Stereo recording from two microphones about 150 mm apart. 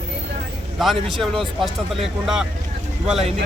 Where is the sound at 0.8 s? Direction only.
Centre (ahead or behind).